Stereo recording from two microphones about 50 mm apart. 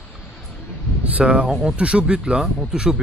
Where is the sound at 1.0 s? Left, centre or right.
Right.